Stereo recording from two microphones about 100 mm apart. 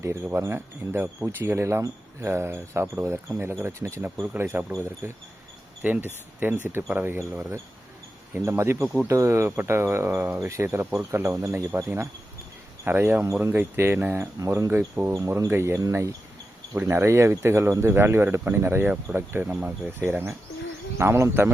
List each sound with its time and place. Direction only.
0.0 s speech: 25° right (ahead or behind)
5.8 s cricket: 15° right (ahead or behind)
6.4 s speech: 20° right (ahead or behind)
19.1 s cricket: 20° right (ahead or behind)
21.0 s speech: 25° right (ahead or behind)